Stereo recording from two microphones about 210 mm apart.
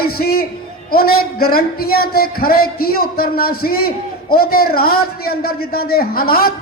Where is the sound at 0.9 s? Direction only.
45° left (ahead or behind).